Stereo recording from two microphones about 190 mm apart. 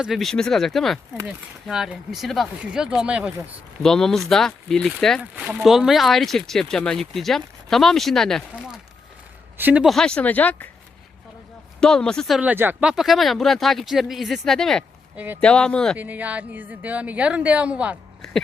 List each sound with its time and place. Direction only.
0.0 s speech: centre (ahead or behind)
5.2 s speech: 10° right (ahead or behind); by 10.7 s 10° left (ahead or behind)
11.8 s speech: 5° left (ahead or behind)
12.4 s speech: 10° right (ahead or behind)
15.1 s speech: 10° right (ahead or behind)
15.4 s speech: 5° left (ahead or behind)
16.0 s a woman's voice: 10° right (ahead or behind)